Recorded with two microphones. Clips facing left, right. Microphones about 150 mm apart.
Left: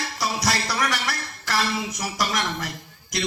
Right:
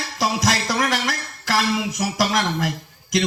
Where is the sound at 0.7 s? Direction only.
45° right (ahead or behind).